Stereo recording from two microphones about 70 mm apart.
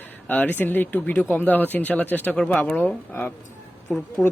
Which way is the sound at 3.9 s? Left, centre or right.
Centre.